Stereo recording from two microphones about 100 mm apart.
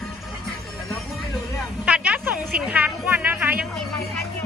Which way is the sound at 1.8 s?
10° right (ahead or behind).